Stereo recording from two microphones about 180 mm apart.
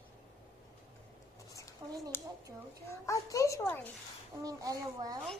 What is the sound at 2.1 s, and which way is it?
Speech, 10° left (ahead or behind).